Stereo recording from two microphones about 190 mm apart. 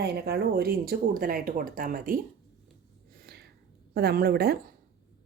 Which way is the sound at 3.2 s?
55° right (ahead or behind).